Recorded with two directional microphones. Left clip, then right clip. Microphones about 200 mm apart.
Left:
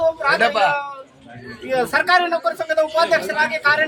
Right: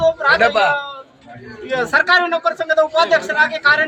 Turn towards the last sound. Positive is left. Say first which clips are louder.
# right 3 dB
turn(degrees=10)  # may be behind; listen again after turning